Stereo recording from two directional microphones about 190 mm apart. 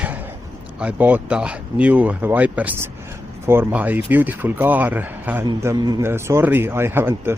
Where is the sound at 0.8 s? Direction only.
10° right (ahead or behind).